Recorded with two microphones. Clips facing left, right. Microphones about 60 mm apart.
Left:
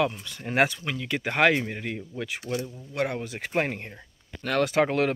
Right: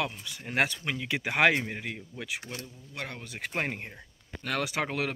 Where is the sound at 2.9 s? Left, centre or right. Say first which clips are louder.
Left 10 dB; centre.